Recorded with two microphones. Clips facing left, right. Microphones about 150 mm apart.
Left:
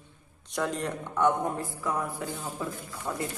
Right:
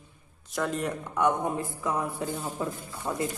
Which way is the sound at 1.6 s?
20° right (ahead or behind).